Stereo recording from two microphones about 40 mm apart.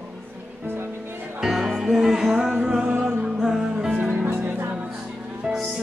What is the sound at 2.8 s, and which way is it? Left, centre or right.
Music, right.